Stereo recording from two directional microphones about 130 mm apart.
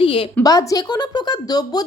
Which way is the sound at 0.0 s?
45° left (ahead or behind).